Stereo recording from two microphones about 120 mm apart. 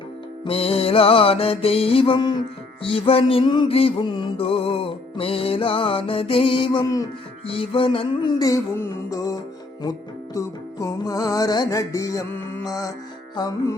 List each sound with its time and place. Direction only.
0.4 s music: 50° left (ahead or behind)
2.8 s music: 50° left (ahead or behind)
6.8 s music: 30° left (ahead or behind)
7.4 s music: 50° left (ahead or behind); by 13.7 s 35° left (ahead or behind)